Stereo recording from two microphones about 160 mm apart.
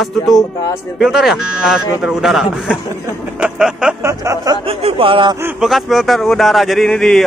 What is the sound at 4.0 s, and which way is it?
Speech, 20° right (ahead or behind).